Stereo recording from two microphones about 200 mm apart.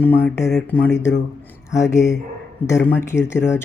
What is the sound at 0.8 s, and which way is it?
Speech, 60° left (ahead or behind).